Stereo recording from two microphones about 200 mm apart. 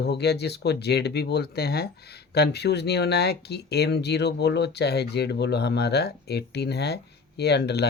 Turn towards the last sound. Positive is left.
turn(degrees=55)  # may be behind; listen again after turning